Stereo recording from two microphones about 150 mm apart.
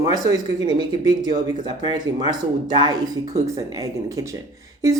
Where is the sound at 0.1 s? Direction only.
25° right (ahead or behind).